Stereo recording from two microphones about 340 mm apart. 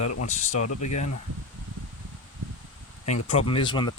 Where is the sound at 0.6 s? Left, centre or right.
Left.